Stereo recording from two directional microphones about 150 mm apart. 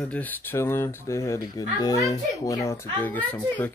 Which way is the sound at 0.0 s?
10° left (ahead or behind).